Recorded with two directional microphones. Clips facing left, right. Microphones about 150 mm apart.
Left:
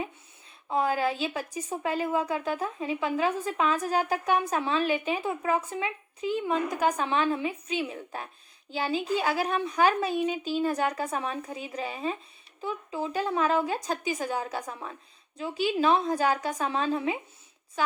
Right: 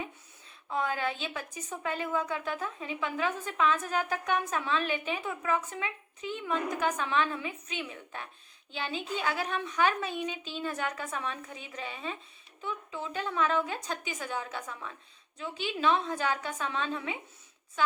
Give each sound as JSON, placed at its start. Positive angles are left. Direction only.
{"t": 0.7, "sound": "a woman's voice", "side_deg": 35}